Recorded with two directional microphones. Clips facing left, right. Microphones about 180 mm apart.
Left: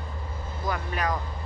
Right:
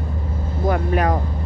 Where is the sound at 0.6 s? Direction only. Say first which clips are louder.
Right 10 dB; 55° right (ahead or behind).